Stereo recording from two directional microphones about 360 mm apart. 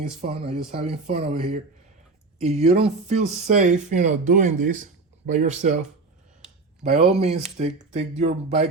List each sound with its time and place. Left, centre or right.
0.2 s speech: centre
6.8 s speech: centre